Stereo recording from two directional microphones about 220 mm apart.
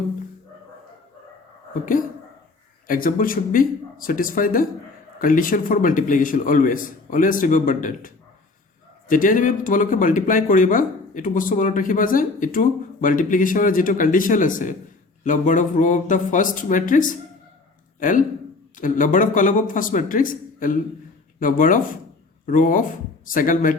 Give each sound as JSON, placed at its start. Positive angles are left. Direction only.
{"t": 2.8, "sound": "speech", "side_deg": 40}
{"t": 18.8, "sound": "speech", "side_deg": 35}